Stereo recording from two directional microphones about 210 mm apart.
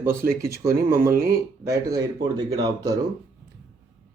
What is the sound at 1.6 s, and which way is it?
Speech, 15° right (ahead or behind).